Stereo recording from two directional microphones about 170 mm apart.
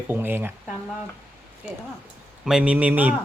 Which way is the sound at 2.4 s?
5° right (ahead or behind).